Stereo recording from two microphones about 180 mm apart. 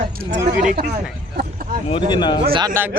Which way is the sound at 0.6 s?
50° right (ahead or behind).